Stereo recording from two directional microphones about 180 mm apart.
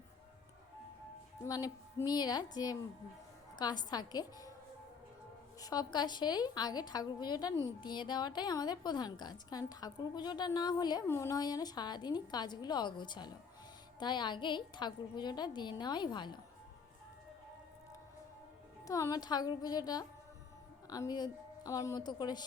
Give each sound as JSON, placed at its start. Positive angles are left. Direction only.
{"t": 1.5, "sound": "speech", "side_deg": 20}
{"t": 5.5, "sound": "speech", "side_deg": 20}
{"t": 18.9, "sound": "speech", "side_deg": 20}